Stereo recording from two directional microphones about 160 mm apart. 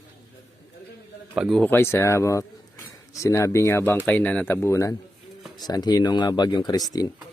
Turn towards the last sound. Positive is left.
turn(degrees=25)  # may be behind; listen again after turning